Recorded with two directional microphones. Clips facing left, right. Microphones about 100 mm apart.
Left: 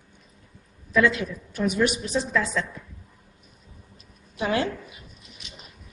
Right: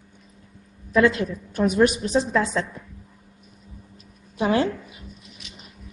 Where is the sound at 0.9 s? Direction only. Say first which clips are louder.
Right 3 dB; 40° right (ahead or behind).